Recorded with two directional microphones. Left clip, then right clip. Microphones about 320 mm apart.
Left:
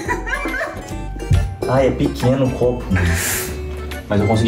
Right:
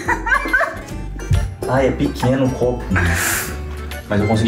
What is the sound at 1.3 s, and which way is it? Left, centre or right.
Speech, centre.